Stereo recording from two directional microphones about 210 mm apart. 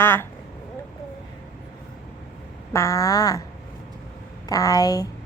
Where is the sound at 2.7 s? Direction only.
15° left (ahead or behind).